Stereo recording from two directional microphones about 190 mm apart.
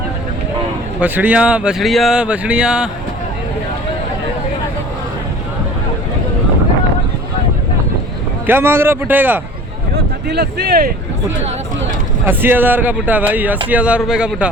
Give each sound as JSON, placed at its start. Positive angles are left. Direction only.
{"t": 0.9, "sound": "speech", "side_deg": -10}
{"t": 8.4, "sound": "speech", "side_deg": -10}
{"t": 9.9, "sound": "speech", "side_deg": -60}
{"t": 12.2, "sound": "speech", "side_deg": -10}